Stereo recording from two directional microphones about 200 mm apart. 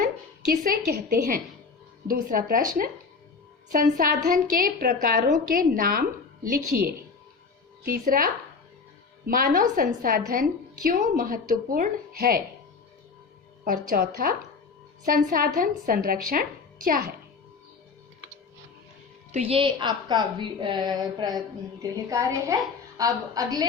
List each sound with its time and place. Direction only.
0.6 s a woman's voice: 45° right (ahead or behind)
13.7 s a woman's voice: 45° right (ahead or behind)
19.3 s a woman's voice: 30° right (ahead or behind)